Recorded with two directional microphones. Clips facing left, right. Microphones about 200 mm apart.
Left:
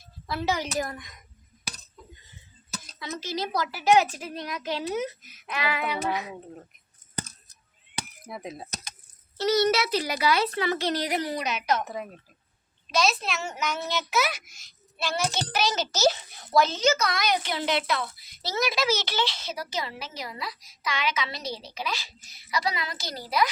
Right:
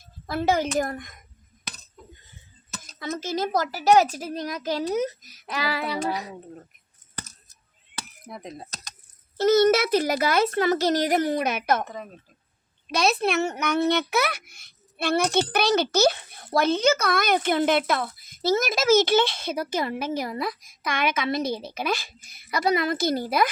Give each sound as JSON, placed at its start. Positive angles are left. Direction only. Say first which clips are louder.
{"t": 0.3, "sound": "speech", "louder": "right 5 dB", "side_deg": -50}
{"t": 2.6, "sound": "a sound", "louder": "left 1 dB", "side_deg": 0}
{"t": 3.0, "sound": "a child's voice", "louder": "right 5 dB", "side_deg": -50}
{"t": 8.3, "sound": "speech", "louder": "even", "side_deg": 5}
{"t": 9.4, "sound": "speech", "louder": "right 5 dB", "side_deg": -50}
{"t": 12.9, "sound": "a child's voice", "louder": "right 4 dB", "side_deg": -60}